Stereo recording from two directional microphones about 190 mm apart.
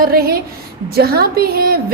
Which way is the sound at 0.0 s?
50° right (ahead or behind).